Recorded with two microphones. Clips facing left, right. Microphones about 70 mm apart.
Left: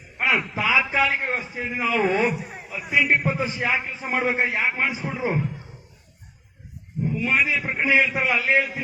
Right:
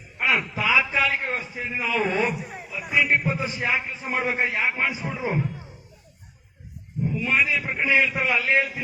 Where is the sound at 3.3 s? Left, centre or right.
Left.